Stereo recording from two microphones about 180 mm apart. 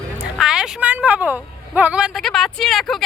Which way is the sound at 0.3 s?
5° right (ahead or behind).